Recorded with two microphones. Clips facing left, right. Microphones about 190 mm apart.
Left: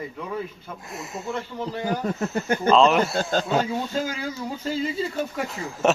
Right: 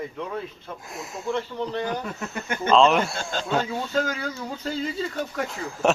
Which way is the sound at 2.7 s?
Centre (ahead or behind).